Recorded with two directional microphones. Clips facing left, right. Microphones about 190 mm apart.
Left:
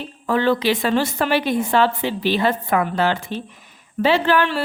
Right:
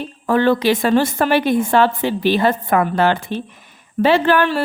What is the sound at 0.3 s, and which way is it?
A woman's voice, 50° right (ahead or behind).